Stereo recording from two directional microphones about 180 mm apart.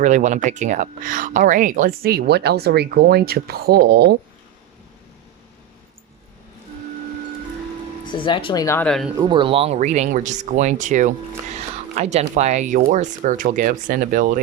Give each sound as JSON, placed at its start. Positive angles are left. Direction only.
{"t": 0.0, "sound": "speech", "side_deg": -45}
{"t": 8.0, "sound": "speech", "side_deg": 25}
{"t": 8.6, "sound": "speech", "side_deg": 15}
{"t": 8.9, "sound": "speech", "side_deg": 0}
{"t": 9.1, "sound": "speech", "side_deg": -25}